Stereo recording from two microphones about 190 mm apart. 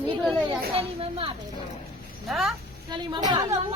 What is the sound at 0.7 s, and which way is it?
Speech, 30° right (ahead or behind).